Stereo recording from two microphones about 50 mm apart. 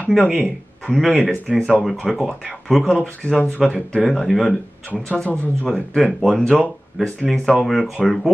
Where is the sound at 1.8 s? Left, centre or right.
Centre.